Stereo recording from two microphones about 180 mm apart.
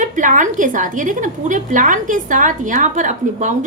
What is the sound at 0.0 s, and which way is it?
A woman's voice, 45° right (ahead or behind).